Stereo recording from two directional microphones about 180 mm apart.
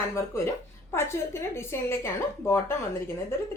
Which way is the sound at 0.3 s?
15° left (ahead or behind).